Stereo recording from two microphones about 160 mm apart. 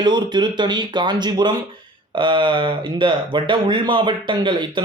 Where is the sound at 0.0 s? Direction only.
30° right (ahead or behind).